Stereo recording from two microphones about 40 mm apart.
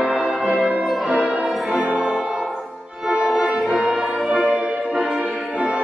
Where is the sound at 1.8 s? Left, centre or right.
Right.